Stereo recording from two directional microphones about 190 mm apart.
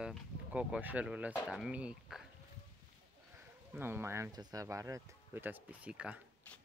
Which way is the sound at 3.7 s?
10° right (ahead or behind).